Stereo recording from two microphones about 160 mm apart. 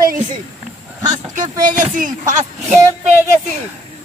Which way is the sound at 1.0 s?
50° right (ahead or behind).